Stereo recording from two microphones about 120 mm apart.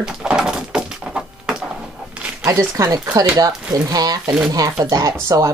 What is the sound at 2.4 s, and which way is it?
Speech, 25° right (ahead or behind).